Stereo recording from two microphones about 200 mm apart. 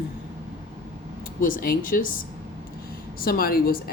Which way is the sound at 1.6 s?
45° left (ahead or behind).